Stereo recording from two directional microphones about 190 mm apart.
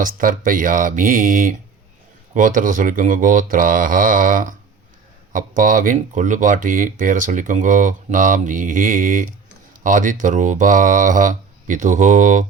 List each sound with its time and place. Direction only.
0.0 s speech: 45° right (ahead or behind)